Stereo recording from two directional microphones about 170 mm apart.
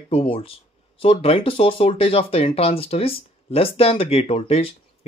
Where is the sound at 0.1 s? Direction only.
35° left (ahead or behind).